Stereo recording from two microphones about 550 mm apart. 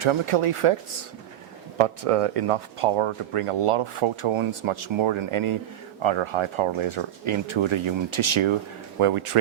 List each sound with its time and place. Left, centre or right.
0.0 s speech: right
1.8 s speech: right